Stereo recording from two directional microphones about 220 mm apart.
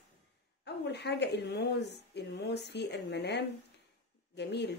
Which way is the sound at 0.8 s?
50° left (ahead or behind).